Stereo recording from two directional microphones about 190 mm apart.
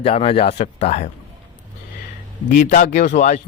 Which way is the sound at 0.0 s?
30° left (ahead or behind).